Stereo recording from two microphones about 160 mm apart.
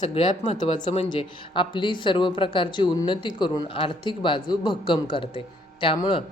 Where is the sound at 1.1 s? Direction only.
30° left (ahead or behind).